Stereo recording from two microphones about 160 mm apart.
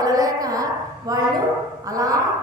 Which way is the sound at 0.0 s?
25° right (ahead or behind).